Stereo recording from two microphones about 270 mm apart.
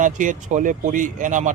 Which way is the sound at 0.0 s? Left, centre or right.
Right.